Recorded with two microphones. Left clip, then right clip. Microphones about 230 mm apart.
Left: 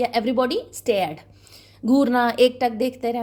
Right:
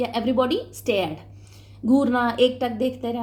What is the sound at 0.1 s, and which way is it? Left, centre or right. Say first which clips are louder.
Speech: left 1 dB; left.